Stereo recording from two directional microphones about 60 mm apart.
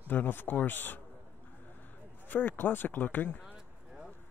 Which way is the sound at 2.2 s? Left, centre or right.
Left.